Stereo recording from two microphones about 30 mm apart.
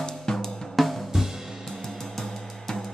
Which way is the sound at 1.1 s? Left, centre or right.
Centre.